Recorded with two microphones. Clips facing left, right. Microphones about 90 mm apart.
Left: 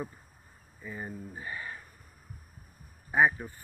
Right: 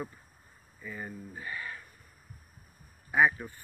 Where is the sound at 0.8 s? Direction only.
25° left (ahead or behind).